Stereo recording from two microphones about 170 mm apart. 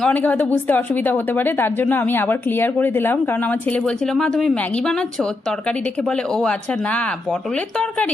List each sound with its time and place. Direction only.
0.0 s a woman's voice: 10° left (ahead or behind)